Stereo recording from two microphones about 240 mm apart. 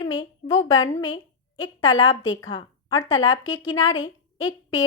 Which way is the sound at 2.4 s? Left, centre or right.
Centre.